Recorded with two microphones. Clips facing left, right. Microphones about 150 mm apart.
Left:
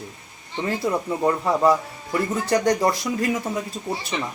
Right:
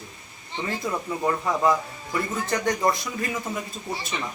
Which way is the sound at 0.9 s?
20° left (ahead or behind).